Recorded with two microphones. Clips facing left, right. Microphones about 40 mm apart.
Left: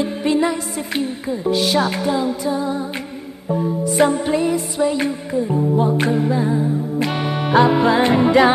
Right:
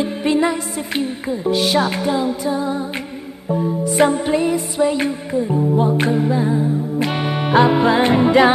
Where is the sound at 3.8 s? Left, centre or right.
Centre.